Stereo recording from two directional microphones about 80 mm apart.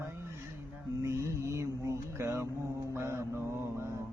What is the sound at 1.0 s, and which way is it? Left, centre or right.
Music, right.